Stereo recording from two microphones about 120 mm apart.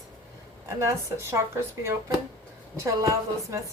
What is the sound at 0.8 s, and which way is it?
A woman's voice, 25° right (ahead or behind).